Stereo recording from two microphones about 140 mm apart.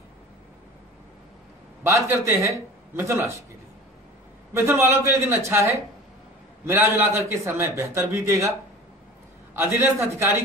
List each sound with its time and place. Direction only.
1.8 s a man's voice: 20° right (ahead or behind)
4.6 s a man's voice: 20° right (ahead or behind)
9.6 s a man's voice: 15° right (ahead or behind)